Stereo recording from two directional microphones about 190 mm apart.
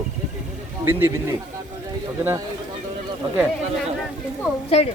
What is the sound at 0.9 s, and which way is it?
Speech, 15° right (ahead or behind).